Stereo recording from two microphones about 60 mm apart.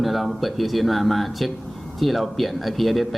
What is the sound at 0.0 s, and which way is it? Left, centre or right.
A man's voice, centre.